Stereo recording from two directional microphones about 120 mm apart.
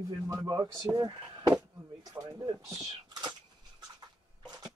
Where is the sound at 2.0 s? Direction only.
20° right (ahead or behind).